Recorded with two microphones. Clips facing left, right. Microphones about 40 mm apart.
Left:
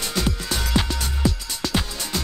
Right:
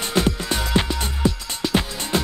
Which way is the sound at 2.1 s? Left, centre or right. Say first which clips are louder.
Right 6 dB; right.